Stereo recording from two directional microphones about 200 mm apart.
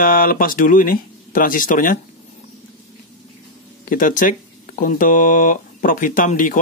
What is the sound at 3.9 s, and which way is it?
Speech, 40° left (ahead or behind).